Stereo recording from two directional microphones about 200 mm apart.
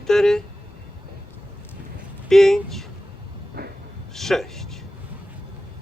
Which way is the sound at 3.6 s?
50° right (ahead or behind).